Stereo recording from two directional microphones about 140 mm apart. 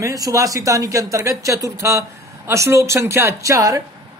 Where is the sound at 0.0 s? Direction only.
25° right (ahead or behind).